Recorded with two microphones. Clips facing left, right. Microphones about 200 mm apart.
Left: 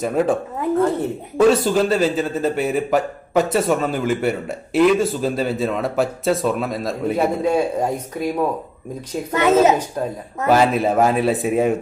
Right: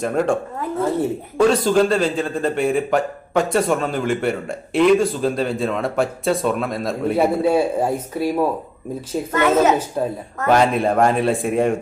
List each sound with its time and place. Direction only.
0.0 s a man's voice: 5° left (ahead or behind)
1.4 s a man's voice: 5° left (ahead or behind)
9.3 s a woman's voice: 15° left (ahead or behind)
10.4 s a man's voice: 5° left (ahead or behind)